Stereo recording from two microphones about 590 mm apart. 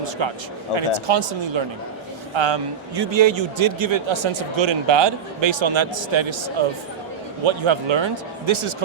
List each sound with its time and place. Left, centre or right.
0.0 s speech: right
7.4 s speech: right